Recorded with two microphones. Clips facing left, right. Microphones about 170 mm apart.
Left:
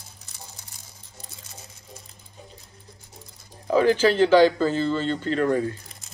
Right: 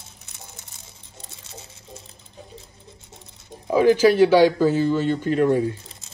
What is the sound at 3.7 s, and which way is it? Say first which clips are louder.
Speech: right 3 dB; 15° right (ahead or behind).